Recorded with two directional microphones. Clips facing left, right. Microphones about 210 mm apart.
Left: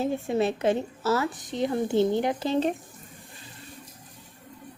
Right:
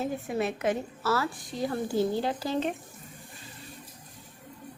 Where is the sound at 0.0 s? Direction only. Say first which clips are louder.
Left 5 dB; 25° left (ahead or behind).